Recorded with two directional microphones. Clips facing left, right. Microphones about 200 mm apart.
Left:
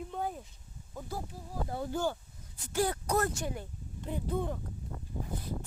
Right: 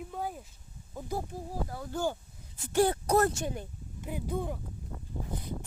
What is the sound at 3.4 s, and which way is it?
Speech, 20° right (ahead or behind).